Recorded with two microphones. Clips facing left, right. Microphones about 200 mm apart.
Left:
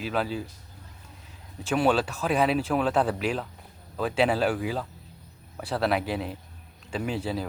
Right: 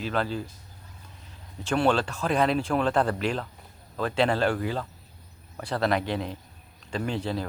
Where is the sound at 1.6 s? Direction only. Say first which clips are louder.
Even; 5° left (ahead or behind).